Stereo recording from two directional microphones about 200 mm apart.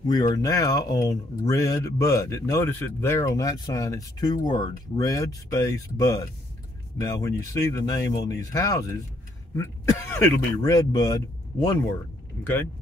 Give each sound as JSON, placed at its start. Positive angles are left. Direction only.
{"t": 0.0, "sound": "a man's voice", "side_deg": 20}